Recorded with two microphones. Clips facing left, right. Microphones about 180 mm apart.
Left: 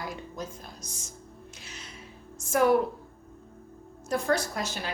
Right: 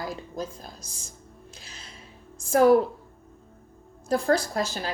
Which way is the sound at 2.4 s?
35° right (ahead or behind).